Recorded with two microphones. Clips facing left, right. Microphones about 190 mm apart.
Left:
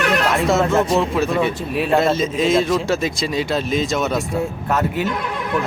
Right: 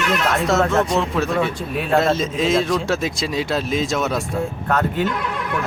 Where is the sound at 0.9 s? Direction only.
5° left (ahead or behind).